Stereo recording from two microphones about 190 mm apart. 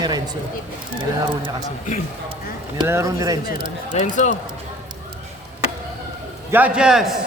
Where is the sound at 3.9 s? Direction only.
40° left (ahead or behind).